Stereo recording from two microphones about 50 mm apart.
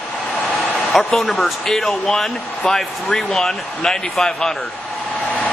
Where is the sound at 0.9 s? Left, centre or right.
Centre.